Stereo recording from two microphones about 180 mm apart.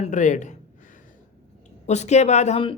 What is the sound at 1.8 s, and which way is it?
Speech, 40° left (ahead or behind).